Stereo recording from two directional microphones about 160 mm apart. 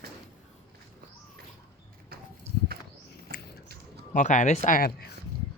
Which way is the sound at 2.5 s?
40° right (ahead or behind).